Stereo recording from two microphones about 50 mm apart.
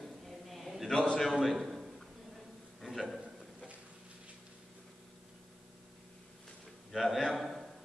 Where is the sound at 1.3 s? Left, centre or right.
Centre.